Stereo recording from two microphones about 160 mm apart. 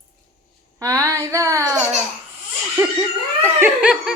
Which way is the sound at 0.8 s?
20° right (ahead or behind).